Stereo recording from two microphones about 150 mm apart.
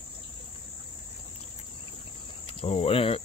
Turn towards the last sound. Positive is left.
turn(degrees=40)  # may be behind; listen again after turning